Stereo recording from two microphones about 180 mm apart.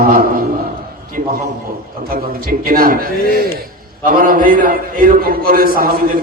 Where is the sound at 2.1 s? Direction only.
55° right (ahead or behind).